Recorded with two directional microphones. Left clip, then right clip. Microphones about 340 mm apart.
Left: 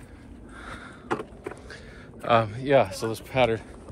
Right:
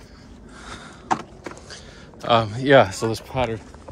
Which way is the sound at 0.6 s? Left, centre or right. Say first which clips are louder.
Right 2 dB; centre.